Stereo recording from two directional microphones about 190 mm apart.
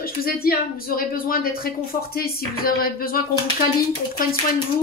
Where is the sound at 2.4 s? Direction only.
50° left (ahead or behind).